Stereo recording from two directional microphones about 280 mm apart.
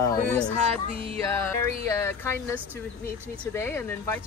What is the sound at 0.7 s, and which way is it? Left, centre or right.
Speech, centre.